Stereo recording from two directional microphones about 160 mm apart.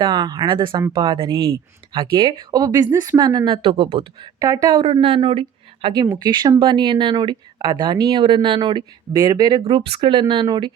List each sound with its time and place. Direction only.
0.0 s speech: 30° right (ahead or behind)
4.4 s speech: 20° right (ahead or behind)
9.6 s speech: 35° right (ahead or behind)